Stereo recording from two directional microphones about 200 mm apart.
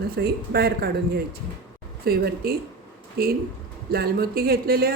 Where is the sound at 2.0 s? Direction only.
50° right (ahead or behind).